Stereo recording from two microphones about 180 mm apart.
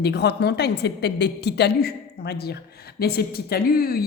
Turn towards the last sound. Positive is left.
turn(degrees=55)  # may be behind; listen again after turning